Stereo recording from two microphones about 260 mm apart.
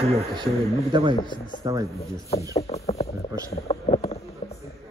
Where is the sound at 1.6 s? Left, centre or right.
Centre.